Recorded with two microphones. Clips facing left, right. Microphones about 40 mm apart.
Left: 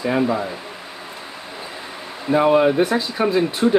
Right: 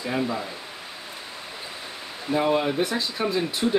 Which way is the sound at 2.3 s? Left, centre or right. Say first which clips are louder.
Left 8 dB; centre.